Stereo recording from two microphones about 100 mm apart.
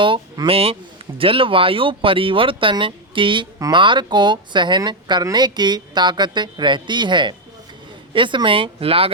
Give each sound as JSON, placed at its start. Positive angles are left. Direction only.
{"t": 0.4, "sound": "speech", "side_deg": -70}